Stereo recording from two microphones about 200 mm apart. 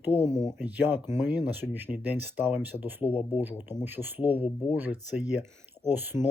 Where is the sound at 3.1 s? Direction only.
25° left (ahead or behind).